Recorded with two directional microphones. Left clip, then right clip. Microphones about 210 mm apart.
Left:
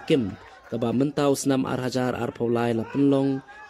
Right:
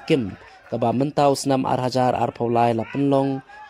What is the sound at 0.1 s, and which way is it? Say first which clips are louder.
Speech: right 2 dB; 15° right (ahead or behind).